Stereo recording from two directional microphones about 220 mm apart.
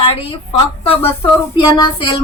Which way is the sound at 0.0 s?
25° left (ahead or behind).